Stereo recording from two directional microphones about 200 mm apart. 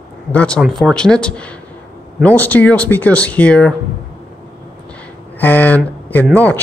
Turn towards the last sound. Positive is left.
turn(degrees=10)  # may be behind; listen again after turning